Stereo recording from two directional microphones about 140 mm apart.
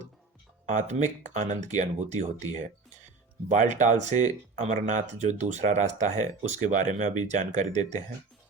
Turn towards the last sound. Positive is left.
turn(degrees=-60)  # may be behind; listen again after turning